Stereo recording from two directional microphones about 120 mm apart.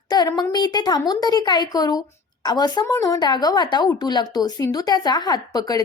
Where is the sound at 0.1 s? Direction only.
35° left (ahead or behind).